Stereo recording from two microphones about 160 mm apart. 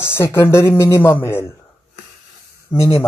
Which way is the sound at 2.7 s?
15° left (ahead or behind).